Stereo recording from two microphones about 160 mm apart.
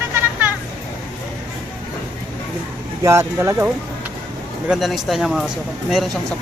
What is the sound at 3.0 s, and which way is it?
Speech, 20° right (ahead or behind).